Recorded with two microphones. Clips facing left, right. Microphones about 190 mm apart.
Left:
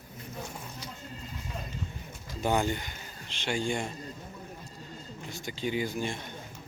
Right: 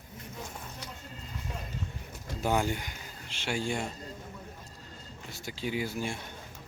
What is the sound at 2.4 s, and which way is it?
Speech, 5° right (ahead or behind).